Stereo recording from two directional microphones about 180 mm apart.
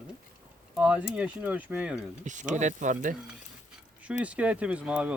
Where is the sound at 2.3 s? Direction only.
45° right (ahead or behind).